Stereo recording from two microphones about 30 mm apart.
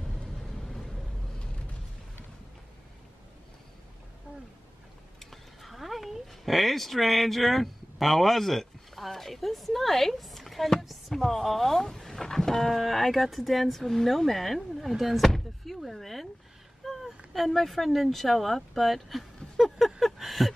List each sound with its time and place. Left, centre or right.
0.6 s vehicle: centre
5.2 s speech: centre
12.5 s speech: centre
15.2 s door: centre
16.8 s a sound: centre
17.3 s speech: centre
19.6 s a sound: centre